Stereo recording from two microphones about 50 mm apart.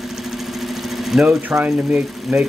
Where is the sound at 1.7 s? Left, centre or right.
Centre.